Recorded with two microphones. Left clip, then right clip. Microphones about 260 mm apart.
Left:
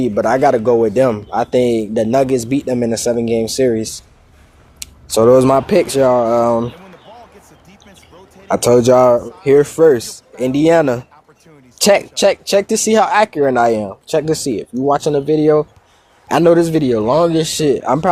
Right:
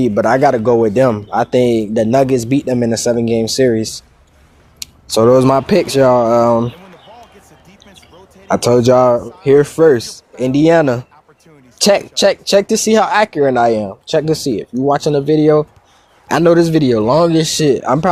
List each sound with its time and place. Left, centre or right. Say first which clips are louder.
0.0 s speech: right 1 dB; right
7.9 s basketball bounce: even; centre
8.4 s speech: even; right